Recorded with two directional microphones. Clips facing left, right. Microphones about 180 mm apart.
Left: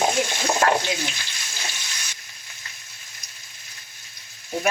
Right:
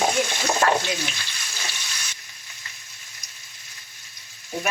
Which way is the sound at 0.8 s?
15° left (ahead or behind).